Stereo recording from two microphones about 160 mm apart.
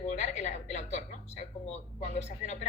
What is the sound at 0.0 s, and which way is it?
A woman's voice, 45° left (ahead or behind).